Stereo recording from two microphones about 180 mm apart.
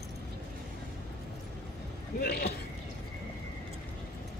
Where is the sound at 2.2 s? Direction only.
60° left (ahead or behind).